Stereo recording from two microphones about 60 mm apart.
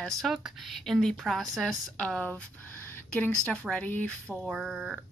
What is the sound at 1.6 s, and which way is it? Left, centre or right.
A woman's voice, centre.